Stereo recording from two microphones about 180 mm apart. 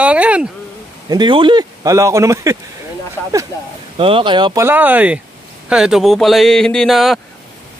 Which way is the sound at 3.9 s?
30° right (ahead or behind).